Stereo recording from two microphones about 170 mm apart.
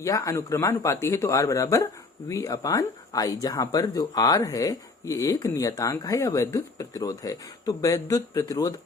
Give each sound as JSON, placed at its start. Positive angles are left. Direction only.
{"t": 0.0, "sound": "speech", "side_deg": 20}